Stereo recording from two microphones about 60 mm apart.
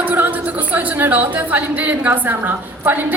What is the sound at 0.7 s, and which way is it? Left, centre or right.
A woman's voice, right.